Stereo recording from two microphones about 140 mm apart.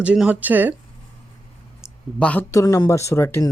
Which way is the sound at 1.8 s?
5° right (ahead or behind).